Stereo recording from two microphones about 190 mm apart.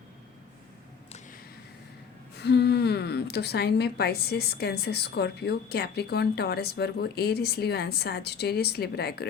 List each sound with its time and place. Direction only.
2.4 s a woman's voice: 60° left (ahead or behind)